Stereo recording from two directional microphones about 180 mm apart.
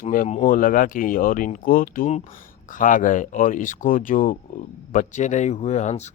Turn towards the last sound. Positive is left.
turn(degrees=40)  # may be behind; listen again after turning